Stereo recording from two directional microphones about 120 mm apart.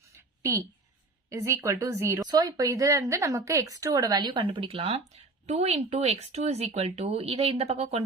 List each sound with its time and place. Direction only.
1.3 s speech: 25° right (ahead or behind); by 8.0 s 60° right (ahead or behind)